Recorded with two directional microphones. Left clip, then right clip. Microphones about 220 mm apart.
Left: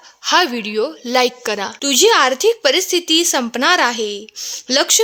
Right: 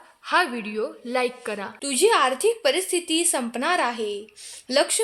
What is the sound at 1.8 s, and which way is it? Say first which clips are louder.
Speech: left 7 dB; 30° left (ahead or behind).